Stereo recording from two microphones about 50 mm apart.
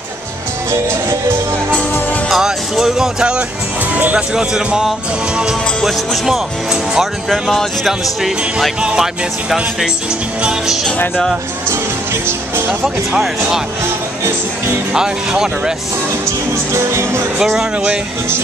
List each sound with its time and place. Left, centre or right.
2.3 s speech: centre; by 4.5 s right
4.6 s speech: centre
7.2 s speech: centre
15.0 s speech: centre
16.7 s music: right
17.4 s speech: centre